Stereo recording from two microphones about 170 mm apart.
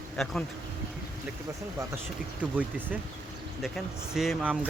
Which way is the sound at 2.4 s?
10° right (ahead or behind).